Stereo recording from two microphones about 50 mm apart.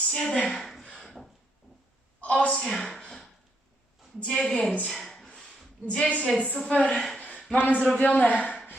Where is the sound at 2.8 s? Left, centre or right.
Centre.